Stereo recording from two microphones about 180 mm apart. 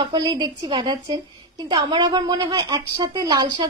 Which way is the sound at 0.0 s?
25° right (ahead or behind).